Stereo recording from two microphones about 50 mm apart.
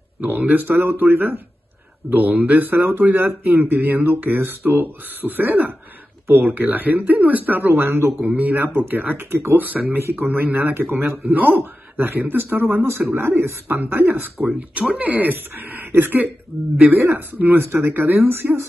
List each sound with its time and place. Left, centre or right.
0.2 s speech: right
6.5 s speech: right
8.2 s a man's voice: right
9.6 s a man's voice: right
13.7 s a man's voice: right
14.5 s speech: right
15.0 s speech: right
17.6 s a man's voice: right